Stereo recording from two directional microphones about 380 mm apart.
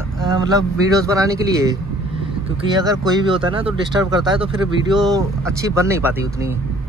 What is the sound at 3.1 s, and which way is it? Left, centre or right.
Speech, centre.